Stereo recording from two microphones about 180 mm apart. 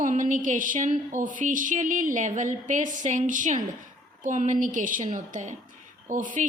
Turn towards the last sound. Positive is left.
turn(degrees=-45)  # may be behind; listen again after turning